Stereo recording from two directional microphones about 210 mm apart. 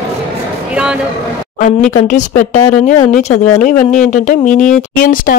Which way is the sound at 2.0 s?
35° left (ahead or behind).